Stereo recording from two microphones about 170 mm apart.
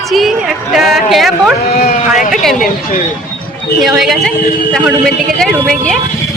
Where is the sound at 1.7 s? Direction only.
55° left (ahead or behind).